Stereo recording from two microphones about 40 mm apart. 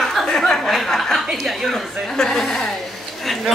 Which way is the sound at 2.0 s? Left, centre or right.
Centre.